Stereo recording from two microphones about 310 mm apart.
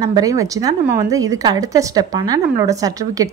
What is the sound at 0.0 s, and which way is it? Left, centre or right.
A woman's voice, centre.